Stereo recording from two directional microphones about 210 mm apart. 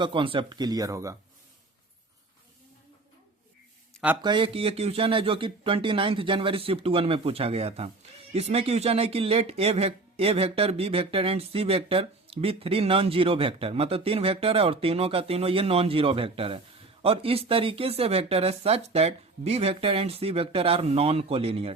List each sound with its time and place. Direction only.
0.0 s speech: 25° right (ahead or behind)
4.2 s speech: 25° right (ahead or behind)